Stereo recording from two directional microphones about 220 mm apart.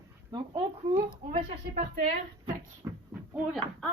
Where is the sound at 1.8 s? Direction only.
40° right (ahead or behind).